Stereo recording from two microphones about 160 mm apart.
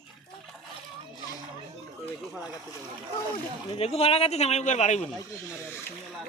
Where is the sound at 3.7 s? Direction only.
40° left (ahead or behind).